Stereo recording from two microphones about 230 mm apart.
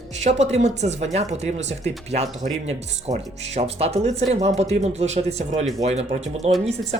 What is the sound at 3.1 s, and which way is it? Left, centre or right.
Speech, centre.